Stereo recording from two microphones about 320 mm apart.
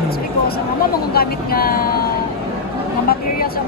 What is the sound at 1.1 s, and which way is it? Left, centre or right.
Speech, left.